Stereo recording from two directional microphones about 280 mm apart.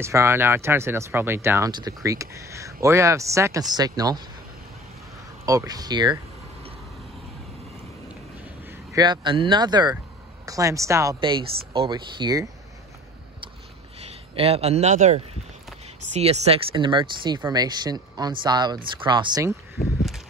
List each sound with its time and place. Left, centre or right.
0.0 s speech: centre
5.4 s speech: centre
8.9 s speech: centre
14.0 s speech: right